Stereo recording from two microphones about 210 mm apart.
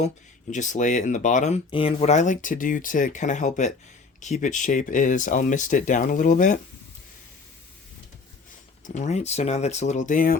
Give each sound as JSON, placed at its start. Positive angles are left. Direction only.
{"t": 0.5, "sound": "speech", "side_deg": 35}
{"t": 8.8, "sound": "speech", "side_deg": 35}